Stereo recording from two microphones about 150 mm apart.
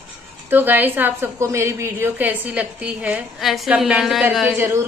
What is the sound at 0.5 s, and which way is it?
A woman's voice, 15° right (ahead or behind).